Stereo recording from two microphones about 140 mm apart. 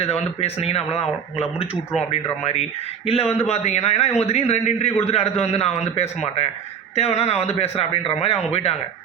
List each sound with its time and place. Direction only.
0.0 s a man's voice: 45° left (ahead or behind)
1.7 s speech: 5° right (ahead or behind)
2.0 s a man's voice: 45° left (ahead or behind)